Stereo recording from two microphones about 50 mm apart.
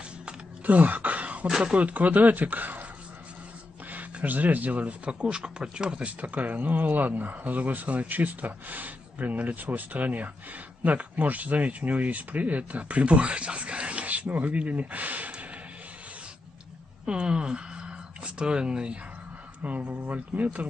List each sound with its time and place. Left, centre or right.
0.7 s a sound: right
1.5 s speech: right
3.9 s speech: right
17.0 s speech: centre
19.6 s speech: right